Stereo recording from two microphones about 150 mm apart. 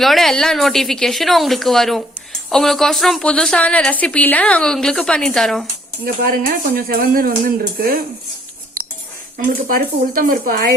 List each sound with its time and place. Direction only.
0.0 s speech: centre (ahead or behind)
6.2 s speech: 90° right; by 8.0 s 75° right (ahead or behind)
9.6 s speech: 70° right (ahead or behind)